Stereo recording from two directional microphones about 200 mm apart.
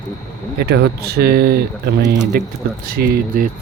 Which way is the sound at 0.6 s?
55° right (ahead or behind).